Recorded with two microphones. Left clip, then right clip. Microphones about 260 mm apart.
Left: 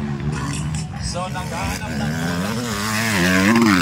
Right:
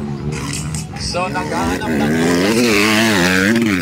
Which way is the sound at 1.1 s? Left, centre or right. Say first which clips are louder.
Right 8 dB; right.